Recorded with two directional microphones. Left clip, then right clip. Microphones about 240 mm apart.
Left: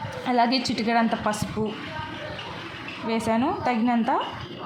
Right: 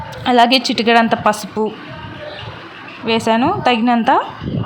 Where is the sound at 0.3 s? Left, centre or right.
Right.